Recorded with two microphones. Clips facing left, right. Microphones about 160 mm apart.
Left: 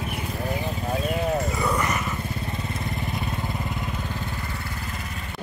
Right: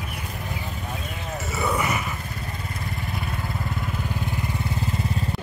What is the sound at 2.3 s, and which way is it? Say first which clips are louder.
Vehicle: left 3 dB; 25° left (ahead or behind).